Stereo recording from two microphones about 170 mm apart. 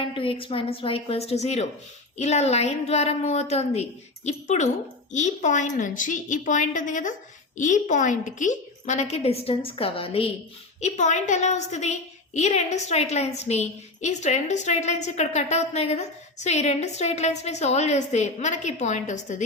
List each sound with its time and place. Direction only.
0.0 s a woman's voice: 30° left (ahead or behind)